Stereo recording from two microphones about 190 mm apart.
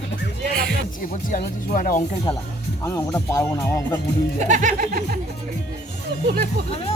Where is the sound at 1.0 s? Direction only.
45° left (ahead or behind).